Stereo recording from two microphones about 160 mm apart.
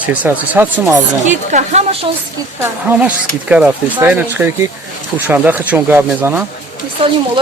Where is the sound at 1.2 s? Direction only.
50° right (ahead or behind).